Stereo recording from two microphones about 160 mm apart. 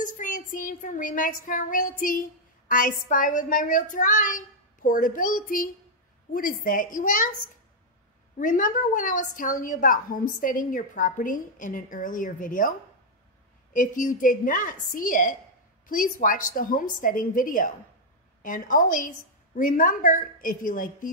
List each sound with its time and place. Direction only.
0.0 s a woman's voice: 55° left (ahead or behind)
8.4 s a woman's voice: 55° left (ahead or behind)
13.7 s a woman's voice: 55° left (ahead or behind)